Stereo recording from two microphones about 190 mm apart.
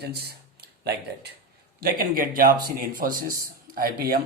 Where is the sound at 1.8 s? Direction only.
50° right (ahead or behind).